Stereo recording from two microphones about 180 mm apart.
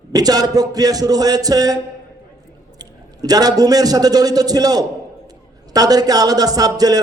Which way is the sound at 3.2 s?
20° right (ahead or behind).